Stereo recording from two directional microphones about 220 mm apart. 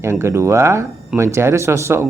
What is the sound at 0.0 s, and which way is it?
Speech, 10° right (ahead or behind).